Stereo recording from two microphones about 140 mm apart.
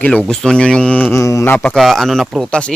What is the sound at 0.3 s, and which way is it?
Speech, 5° left (ahead or behind).